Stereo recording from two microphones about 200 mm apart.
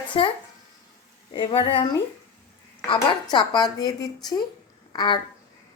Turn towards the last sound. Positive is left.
turn(degrees=20)  # may be behind; listen again after turning